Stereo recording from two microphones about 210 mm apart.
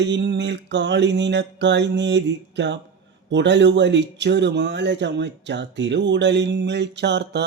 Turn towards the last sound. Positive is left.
turn(degrees=-55)  # may be behind; listen again after turning